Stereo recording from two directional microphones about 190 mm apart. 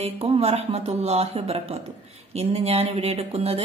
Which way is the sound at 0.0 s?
30° right (ahead or behind).